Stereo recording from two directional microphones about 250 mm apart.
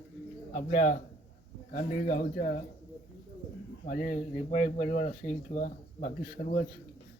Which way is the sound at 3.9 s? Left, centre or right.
Left.